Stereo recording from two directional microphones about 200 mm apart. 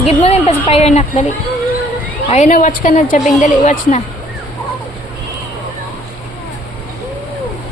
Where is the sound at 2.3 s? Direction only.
40° left (ahead or behind).